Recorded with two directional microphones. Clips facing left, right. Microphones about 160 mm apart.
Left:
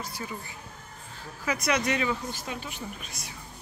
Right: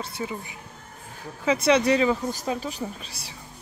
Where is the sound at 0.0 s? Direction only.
25° right (ahead or behind).